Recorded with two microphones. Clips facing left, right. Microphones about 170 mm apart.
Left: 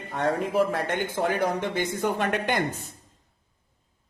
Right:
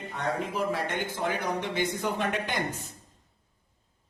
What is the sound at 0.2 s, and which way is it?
Speech, 50° left (ahead or behind).